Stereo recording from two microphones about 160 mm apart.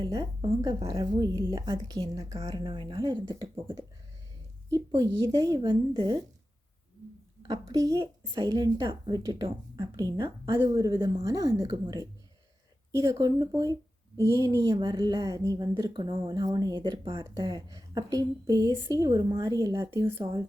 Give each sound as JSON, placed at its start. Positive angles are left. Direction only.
{"t": 0.0, "sound": "a woman's voice", "side_deg": -25}
{"t": 4.7, "sound": "a woman's voice", "side_deg": -25}
{"t": 7.4, "sound": "a woman's voice", "side_deg": -25}